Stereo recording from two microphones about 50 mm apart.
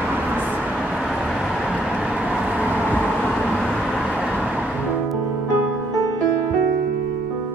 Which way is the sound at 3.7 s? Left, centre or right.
Centre.